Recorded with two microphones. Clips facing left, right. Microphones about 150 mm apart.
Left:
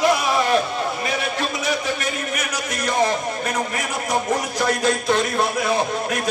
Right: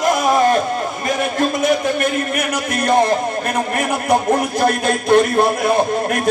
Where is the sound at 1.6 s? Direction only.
55° right (ahead or behind).